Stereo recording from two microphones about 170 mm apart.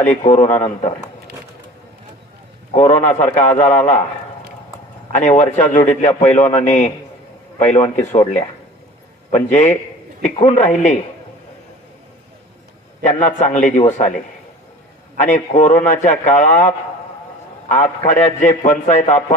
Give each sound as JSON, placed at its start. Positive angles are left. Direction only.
{"t": 0.0, "sound": "a man's voice", "side_deg": 45}
{"t": 2.7, "sound": "a man's voice", "side_deg": 40}
{"t": 5.1, "sound": "a man's voice", "side_deg": 45}
{"t": 7.5, "sound": "a man's voice", "side_deg": 40}
{"t": 9.3, "sound": "a man's voice", "side_deg": 40}
{"t": 13.0, "sound": "a man's voice", "side_deg": 45}
{"t": 15.1, "sound": "a man's voice", "side_deg": 45}